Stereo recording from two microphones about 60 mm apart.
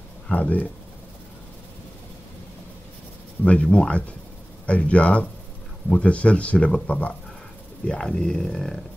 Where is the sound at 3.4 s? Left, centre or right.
Left.